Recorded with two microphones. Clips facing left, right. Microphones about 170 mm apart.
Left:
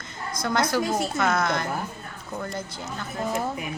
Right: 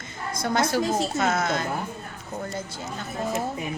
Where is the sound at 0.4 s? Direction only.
25° right (ahead or behind).